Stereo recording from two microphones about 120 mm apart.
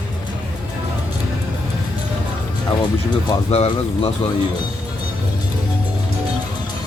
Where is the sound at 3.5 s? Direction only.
60° left (ahead or behind).